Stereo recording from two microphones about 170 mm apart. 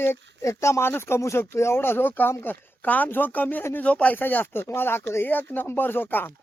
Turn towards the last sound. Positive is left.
turn(degrees=10)  # may be behind; listen again after turning